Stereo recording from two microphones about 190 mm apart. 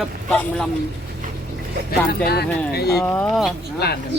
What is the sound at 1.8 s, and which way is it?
Speech, 55° left (ahead or behind).